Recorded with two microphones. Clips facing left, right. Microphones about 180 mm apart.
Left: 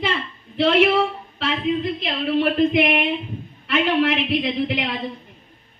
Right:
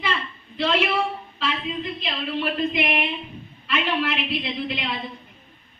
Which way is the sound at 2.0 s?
55° left (ahead or behind).